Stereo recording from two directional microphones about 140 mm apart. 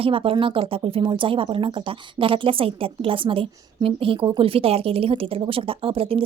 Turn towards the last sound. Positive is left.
turn(degrees=-40)  # may be behind; listen again after turning